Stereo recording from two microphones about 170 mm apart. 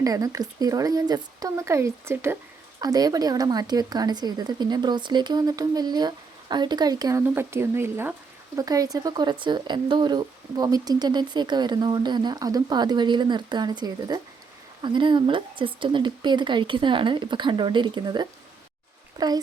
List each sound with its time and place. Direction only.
0.0 s speech: 20° right (ahead or behind)